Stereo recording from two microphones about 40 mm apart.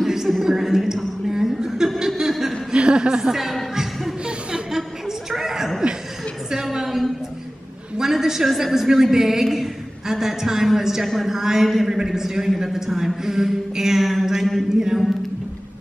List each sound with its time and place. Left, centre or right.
0.0 s a sound: centre
0.4 s a woman's voice: centre
1.3 s chuckle: centre
2.7 s a woman's voice: right; by 3.5 s centre
4.5 s chuckle: centre
6.5 s a sound: centre
8.5 s a woman's voice: centre